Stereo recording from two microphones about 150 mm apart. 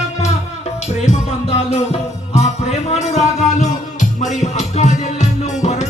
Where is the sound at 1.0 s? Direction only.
45° left (ahead or behind).